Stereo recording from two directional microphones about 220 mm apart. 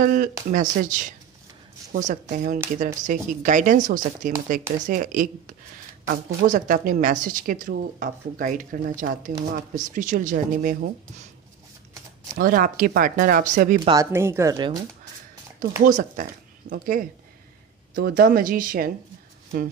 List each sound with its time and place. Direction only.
0.0 s a woman's voice: 40° right (ahead or behind)
12.4 s a woman's voice: 40° right (ahead or behind)
13.8 s speech: 15° right (ahead or behind)
15.8 s a woman's voice: 40° right (ahead or behind)